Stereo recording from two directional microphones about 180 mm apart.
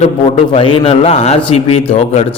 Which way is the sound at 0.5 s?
30° left (ahead or behind).